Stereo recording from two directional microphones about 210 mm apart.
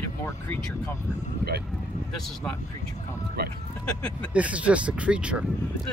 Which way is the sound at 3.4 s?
50° right (ahead or behind).